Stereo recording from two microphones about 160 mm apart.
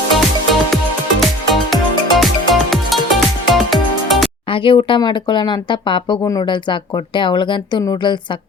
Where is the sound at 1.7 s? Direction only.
Centre (ahead or behind).